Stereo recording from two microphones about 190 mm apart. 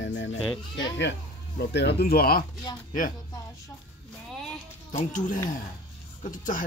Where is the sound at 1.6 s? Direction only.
60° left (ahead or behind).